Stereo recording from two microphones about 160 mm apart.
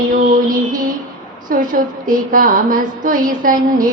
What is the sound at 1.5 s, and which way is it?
A woman's voice, 60° right (ahead or behind).